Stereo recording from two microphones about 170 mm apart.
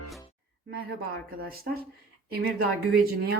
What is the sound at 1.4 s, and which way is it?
Speech, 65° right (ahead or behind).